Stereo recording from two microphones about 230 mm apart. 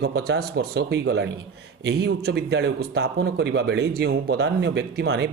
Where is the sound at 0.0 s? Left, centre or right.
Right.